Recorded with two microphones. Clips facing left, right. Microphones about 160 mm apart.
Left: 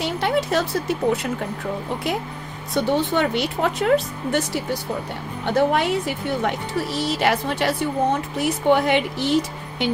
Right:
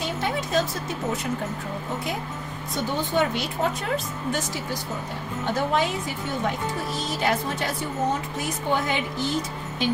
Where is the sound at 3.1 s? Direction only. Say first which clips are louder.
Left 3 dB; 75° left (ahead or behind).